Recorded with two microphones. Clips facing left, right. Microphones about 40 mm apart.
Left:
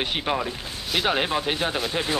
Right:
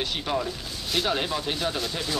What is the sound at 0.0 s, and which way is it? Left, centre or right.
Speech, left.